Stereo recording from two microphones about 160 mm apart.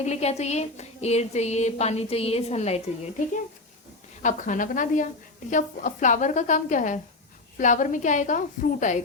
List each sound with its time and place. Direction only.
0.0 s speech: 45° left (ahead or behind)
4.2 s a woman's voice: 55° left (ahead or behind)